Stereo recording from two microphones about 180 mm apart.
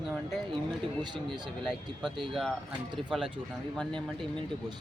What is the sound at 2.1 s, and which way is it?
Speech, 25° right (ahead or behind).